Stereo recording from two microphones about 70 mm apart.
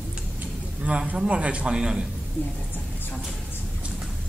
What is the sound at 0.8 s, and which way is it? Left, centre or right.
A man's voice, centre.